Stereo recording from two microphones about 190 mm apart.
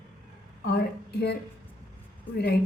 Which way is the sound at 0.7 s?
60° left (ahead or behind).